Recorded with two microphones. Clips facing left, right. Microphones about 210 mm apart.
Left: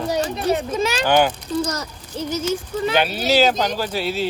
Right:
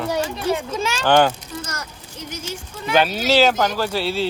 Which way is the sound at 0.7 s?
10° left (ahead or behind).